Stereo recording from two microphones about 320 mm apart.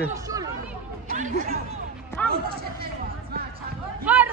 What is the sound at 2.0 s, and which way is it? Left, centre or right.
Music, centre.